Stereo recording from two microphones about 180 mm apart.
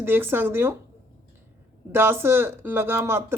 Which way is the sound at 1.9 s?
15° right (ahead or behind).